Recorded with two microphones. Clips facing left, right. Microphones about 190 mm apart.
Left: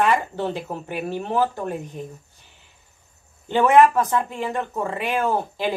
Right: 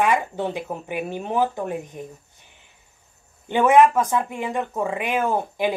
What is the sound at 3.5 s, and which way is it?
Speech, 15° right (ahead or behind).